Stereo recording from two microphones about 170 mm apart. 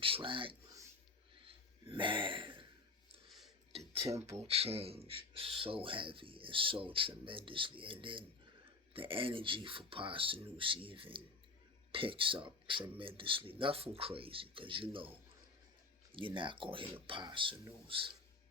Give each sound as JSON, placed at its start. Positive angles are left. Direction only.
{"t": 0.0, "sound": "speech", "side_deg": -30}
{"t": 1.5, "sound": "a sound", "side_deg": -30}
{"t": 3.7, "sound": "dishes", "side_deg": -35}
{"t": 4.4, "sound": "speech", "side_deg": -35}
{"t": 16.1, "sound": "speech", "side_deg": -30}